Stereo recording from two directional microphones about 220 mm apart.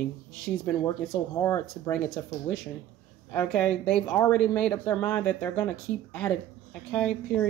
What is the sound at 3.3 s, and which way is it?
Speech, 5° left (ahead or behind).